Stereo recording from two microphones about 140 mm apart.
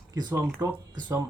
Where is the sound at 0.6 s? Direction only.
30° right (ahead or behind).